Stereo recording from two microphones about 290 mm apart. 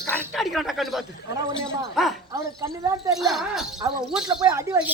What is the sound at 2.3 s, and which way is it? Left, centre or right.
Speech, centre.